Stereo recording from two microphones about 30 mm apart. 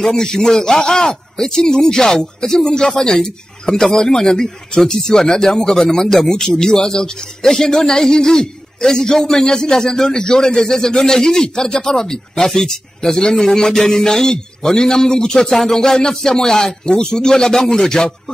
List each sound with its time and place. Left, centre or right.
0.1 s speech: left
15.3 s speech: centre